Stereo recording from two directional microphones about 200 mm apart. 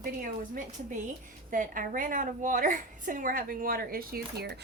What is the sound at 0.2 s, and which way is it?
A woman's voice, 40° right (ahead or behind).